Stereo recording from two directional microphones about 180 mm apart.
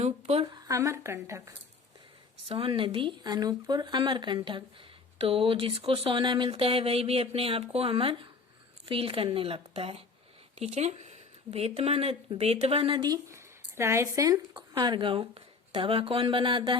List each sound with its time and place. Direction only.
0.0 s speech: 35° right (ahead or behind)
0.7 s a woman's voice: 15° right (ahead or behind)
2.5 s speech: 30° right (ahead or behind)